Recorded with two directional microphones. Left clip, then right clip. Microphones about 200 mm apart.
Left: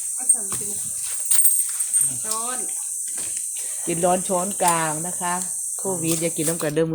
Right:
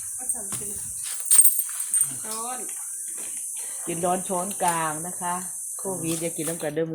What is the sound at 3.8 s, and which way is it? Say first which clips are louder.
Speech: left 5 dB; 35° left (ahead or behind).